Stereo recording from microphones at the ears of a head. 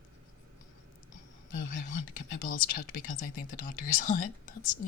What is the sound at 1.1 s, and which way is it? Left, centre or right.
Speech, left.